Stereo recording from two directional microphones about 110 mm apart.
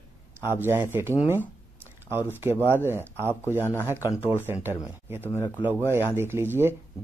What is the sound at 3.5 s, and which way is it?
Speech, 20° left (ahead or behind).